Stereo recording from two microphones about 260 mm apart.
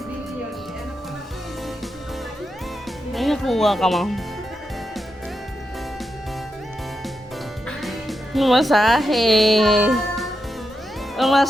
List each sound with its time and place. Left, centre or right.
3.1 s speech: centre
7.7 s speech: centre